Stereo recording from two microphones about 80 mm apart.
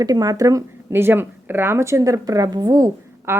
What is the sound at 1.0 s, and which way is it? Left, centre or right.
Speech, right.